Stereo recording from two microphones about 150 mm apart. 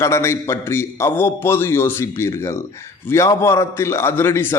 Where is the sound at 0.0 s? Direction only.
15° left (ahead or behind).